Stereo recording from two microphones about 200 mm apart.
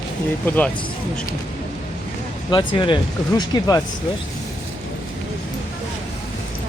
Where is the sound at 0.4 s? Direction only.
10° left (ahead or behind).